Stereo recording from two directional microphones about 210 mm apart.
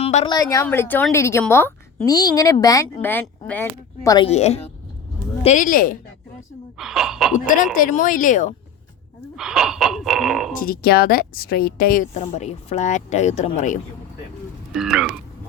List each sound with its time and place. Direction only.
0.0 s a sound: 30° left (ahead or behind)
0.3 s a woman's voice: 15° left (ahead or behind)
4.3 s speech: 30° left (ahead or behind)
6.7 s speech: centre (ahead or behind)
7.3 s speech: 40° left (ahead or behind)
9.3 s speech: 5° right (ahead or behind)
10.5 s a woman's voice: 45° left (ahead or behind)
12.2 s speech: 30° left (ahead or behind)
14.7 s speech: centre (ahead or behind)